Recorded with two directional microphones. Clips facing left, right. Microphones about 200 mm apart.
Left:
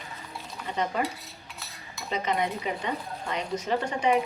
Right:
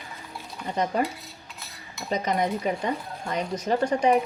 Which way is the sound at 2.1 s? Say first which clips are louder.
Right 3 dB; 40° right (ahead or behind).